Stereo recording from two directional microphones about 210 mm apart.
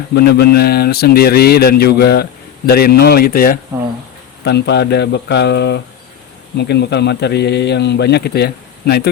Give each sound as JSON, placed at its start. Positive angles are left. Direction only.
{"t": 0.1, "sound": "speech", "side_deg": 50}